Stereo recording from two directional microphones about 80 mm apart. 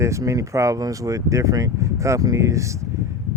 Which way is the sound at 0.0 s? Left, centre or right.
Right.